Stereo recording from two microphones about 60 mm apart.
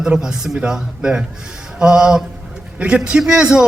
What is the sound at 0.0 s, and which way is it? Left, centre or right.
A man's voice, centre.